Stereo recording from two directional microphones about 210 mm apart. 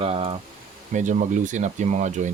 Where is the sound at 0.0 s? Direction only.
25° right (ahead or behind).